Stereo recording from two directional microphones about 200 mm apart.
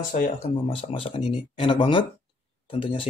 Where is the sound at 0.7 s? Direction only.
25° left (ahead or behind).